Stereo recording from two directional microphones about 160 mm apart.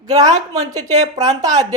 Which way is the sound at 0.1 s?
25° right (ahead or behind).